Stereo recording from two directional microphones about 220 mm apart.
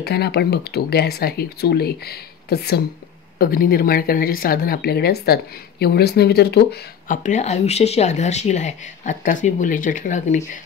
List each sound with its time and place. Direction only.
0.0 s speech: 45° left (ahead or behind)